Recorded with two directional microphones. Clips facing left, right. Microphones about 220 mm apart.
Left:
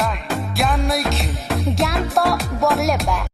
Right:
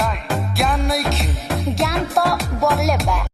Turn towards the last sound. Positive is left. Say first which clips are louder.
# even
turn(degrees=0)  # may be behind; listen again after turning